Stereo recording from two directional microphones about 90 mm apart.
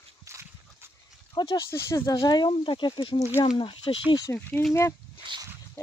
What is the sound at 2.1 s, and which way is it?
Speech, 55° left (ahead or behind).